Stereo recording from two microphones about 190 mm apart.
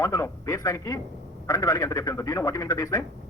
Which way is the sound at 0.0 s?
15° left (ahead or behind).